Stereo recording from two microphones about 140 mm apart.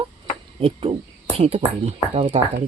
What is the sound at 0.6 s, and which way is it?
Speech, 45° right (ahead or behind).